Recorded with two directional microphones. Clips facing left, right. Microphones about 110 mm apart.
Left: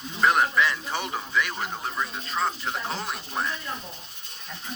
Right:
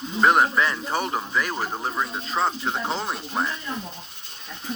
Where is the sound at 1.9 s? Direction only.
30° right (ahead or behind).